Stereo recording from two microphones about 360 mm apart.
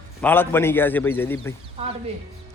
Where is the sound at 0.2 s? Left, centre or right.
Centre.